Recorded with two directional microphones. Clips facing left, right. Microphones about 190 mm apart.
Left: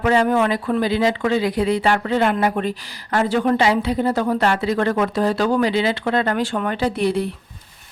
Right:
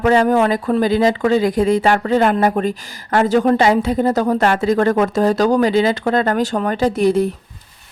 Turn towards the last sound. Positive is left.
turn(degrees=-45)  # may be behind; listen again after turning